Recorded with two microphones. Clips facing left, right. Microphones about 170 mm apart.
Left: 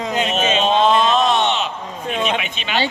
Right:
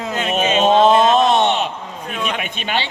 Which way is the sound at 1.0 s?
45° right (ahead or behind).